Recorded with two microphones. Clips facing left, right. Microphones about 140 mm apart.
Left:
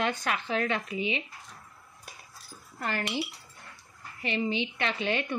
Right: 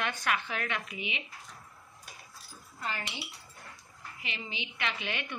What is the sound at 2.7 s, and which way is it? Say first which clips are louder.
Speech: left 7 dB; 65° left (ahead or behind).